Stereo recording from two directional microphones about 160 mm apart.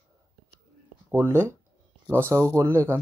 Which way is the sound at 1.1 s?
15° right (ahead or behind).